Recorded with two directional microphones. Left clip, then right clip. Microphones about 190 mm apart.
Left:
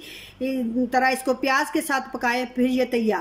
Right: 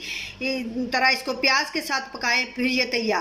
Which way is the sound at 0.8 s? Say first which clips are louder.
Even; 40° left (ahead or behind).